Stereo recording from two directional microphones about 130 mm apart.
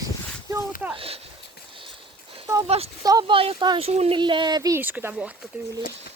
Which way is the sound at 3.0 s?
30° right (ahead or behind).